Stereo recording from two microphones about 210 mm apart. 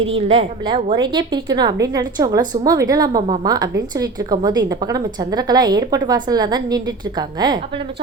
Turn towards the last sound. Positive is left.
turn(degrees=-20)  # may be behind; listen again after turning